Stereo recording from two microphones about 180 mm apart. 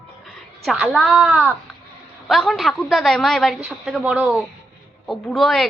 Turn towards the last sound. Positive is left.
turn(degrees=0)  # may be behind; listen again after turning